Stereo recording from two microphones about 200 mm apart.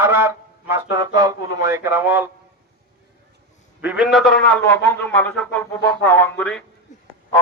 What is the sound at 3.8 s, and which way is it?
A man's voice, 5° right (ahead or behind).